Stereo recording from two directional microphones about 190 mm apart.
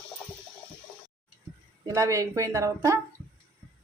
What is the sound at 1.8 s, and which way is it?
A woman's voice, 15° right (ahead or behind).